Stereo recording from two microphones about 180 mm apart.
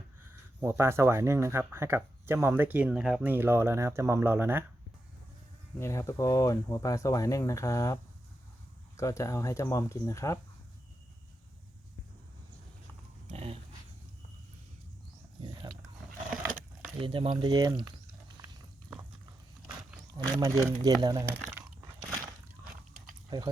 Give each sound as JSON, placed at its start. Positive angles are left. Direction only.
{"t": 0.6, "sound": "speech", "side_deg": -15}
{"t": 5.8, "sound": "speech", "side_deg": 15}
{"t": 9.0, "sound": "speech", "side_deg": 15}
{"t": 13.2, "sound": "dog", "side_deg": -35}
{"t": 17.0, "sound": "speech", "side_deg": -30}
{"t": 20.1, "sound": "speech", "side_deg": -20}
{"t": 22.6, "sound": "a sound", "side_deg": -15}
{"t": 23.3, "sound": "speech", "side_deg": -20}